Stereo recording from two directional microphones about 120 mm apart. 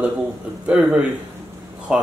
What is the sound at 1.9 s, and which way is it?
Speech, 10° right (ahead or behind).